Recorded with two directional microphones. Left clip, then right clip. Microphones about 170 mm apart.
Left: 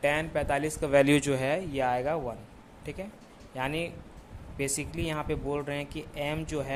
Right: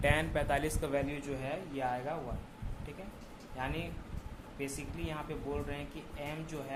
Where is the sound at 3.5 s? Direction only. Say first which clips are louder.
Left 7 dB; 65° left (ahead or behind).